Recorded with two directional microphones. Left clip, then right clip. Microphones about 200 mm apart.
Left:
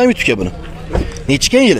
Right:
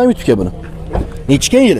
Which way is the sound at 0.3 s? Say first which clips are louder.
Right 2 dB; 20° right (ahead or behind).